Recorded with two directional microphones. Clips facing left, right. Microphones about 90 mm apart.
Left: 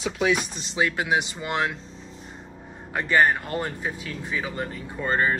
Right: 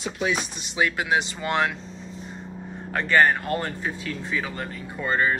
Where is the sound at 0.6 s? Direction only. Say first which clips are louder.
Even; 30° left (ahead or behind).